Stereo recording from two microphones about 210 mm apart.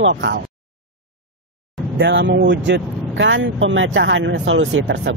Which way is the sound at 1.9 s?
55° right (ahead or behind).